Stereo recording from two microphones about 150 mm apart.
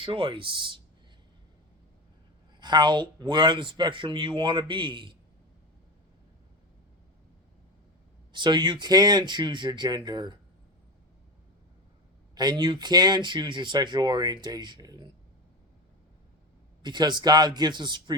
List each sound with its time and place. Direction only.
0.0 s speech: 35° right (ahead or behind)
2.6 s speech: 30° right (ahead or behind)
8.3 s speech: 30° right (ahead or behind)
12.3 s speech: 30° right (ahead or behind)
16.8 s speech: 30° right (ahead or behind)